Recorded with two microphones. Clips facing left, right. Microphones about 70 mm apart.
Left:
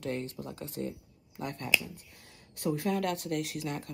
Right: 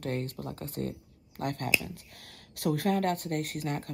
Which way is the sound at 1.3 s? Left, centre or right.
Right.